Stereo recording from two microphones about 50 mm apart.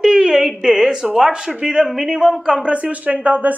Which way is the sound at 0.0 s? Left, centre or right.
Centre.